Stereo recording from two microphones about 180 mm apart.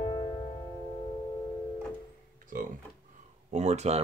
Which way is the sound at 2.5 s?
50° right (ahead or behind).